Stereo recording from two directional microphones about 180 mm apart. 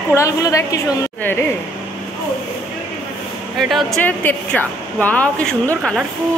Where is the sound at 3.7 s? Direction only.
5° left (ahead or behind).